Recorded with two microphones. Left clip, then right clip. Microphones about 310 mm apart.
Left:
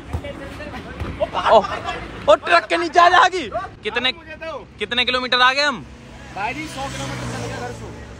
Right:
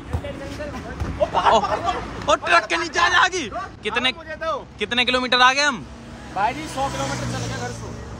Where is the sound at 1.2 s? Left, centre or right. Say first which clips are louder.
Left 2 dB; right.